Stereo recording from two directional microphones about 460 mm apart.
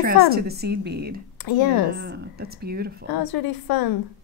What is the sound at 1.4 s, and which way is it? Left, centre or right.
Speech, left.